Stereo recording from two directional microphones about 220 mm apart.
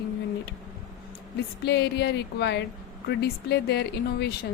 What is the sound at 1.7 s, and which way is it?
A woman's voice, 50° left (ahead or behind).